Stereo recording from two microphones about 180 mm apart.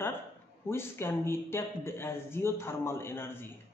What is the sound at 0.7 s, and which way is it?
A man's voice, 15° left (ahead or behind).